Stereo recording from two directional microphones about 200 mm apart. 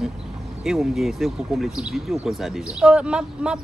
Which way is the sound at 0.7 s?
Centre (ahead or behind).